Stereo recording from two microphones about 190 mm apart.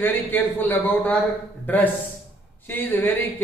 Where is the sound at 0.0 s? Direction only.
10° left (ahead or behind).